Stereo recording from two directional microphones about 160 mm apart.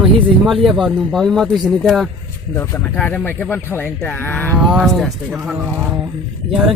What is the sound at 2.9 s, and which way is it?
Speech, 10° left (ahead or behind).